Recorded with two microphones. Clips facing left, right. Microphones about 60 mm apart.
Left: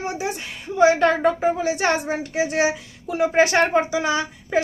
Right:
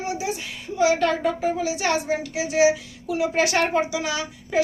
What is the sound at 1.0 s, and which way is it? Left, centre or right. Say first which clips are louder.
Speech: left 4 dB; left.